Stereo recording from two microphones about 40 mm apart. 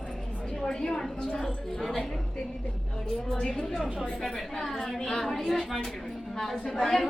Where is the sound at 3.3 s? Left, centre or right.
Centre.